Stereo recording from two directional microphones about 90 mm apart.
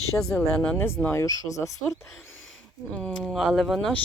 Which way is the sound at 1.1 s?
35° left (ahead or behind).